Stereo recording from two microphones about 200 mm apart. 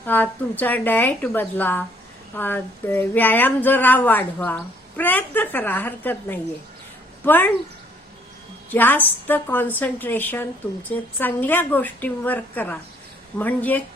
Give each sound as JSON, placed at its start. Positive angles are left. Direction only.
{"t": 0.0, "sound": "speech", "side_deg": 10}
{"t": 8.7, "sound": "speech", "side_deg": 10}